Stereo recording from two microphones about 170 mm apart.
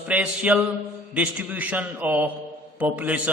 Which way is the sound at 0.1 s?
5° right (ahead or behind).